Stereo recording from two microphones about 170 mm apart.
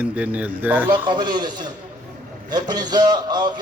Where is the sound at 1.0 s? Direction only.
25° right (ahead or behind).